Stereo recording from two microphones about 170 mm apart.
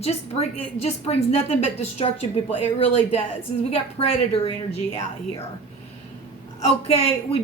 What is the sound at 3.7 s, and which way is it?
Speech, 35° left (ahead or behind).